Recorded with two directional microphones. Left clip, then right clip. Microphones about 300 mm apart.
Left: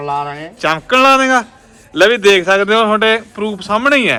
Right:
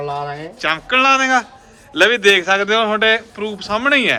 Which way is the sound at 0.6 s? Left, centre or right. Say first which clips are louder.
Left 4 dB; centre.